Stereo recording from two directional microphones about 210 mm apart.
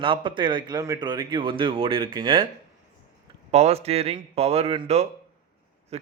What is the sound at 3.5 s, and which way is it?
A man's voice, 30° right (ahead or behind).